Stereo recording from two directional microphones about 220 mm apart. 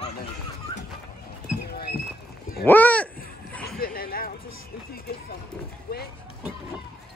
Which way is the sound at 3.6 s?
45° left (ahead or behind).